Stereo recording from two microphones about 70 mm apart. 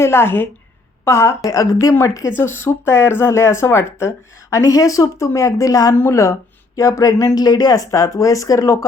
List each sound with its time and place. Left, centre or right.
0.0 s speech: left
1.5 s speech: left
2.3 s speech: left
4.5 s speech: left
6.0 s speech: left
6.7 s speech: left
7.3 s speech: left